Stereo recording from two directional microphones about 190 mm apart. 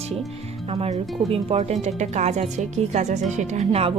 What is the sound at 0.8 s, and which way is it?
A woman's voice, 30° right (ahead or behind).